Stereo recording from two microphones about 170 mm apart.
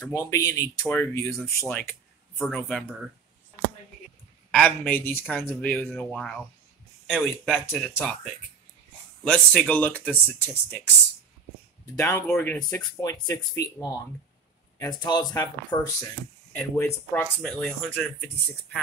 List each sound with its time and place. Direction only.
0.1 s speech: 20° left (ahead or behind)
1.9 s speech: centre (ahead or behind)
4.5 s speech: 10° left (ahead or behind)
11.9 s speech: 15° left (ahead or behind)